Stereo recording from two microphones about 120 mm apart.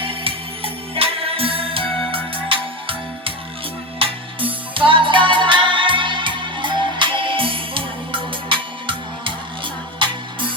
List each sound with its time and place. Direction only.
0.0 s music: 50° right (ahead or behind)